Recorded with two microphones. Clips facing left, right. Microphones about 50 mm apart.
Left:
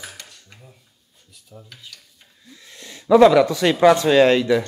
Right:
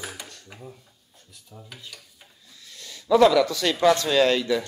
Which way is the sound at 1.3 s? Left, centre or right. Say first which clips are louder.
Left 1 dB; centre.